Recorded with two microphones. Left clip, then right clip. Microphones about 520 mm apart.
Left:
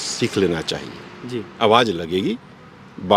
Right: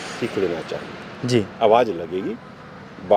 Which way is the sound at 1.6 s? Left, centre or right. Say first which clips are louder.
Left 2 dB; left.